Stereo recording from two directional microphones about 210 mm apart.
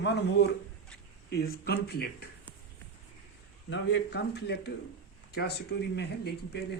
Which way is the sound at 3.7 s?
55° left (ahead or behind).